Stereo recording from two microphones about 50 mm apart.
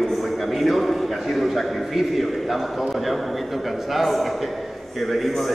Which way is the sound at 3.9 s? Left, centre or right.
Centre.